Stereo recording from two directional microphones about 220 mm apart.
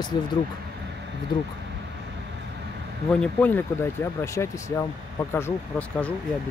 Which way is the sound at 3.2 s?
5° left (ahead or behind).